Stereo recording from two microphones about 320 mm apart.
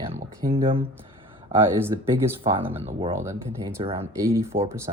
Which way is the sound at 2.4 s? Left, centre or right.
Centre.